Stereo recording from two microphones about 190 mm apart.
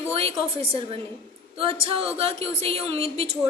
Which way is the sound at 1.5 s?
30° right (ahead or behind).